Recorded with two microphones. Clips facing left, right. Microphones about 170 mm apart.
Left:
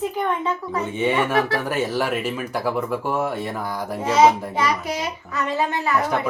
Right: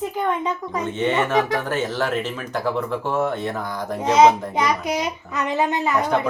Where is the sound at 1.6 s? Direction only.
10° left (ahead or behind).